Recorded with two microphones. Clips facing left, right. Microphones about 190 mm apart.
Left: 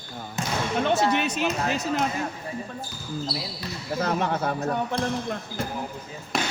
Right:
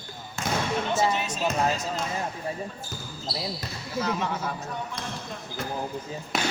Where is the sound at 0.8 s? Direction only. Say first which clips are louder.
Left 6 dB; 65° left (ahead or behind).